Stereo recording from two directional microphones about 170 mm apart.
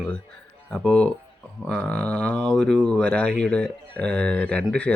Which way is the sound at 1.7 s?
5° left (ahead or behind).